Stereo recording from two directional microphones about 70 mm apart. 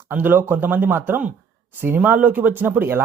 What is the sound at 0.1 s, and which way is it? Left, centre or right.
Speech, right.